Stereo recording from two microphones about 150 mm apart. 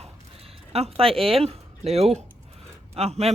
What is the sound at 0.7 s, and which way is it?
Speech, 40° right (ahead or behind).